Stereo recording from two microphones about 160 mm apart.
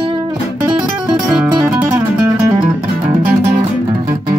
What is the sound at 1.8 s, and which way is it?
Music, 10° right (ahead or behind).